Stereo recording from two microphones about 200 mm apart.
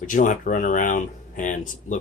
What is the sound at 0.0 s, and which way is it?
Speech, 40° left (ahead or behind).